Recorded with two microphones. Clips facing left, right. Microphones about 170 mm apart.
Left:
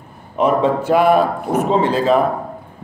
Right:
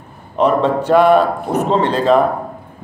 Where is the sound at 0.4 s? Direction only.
5° left (ahead or behind).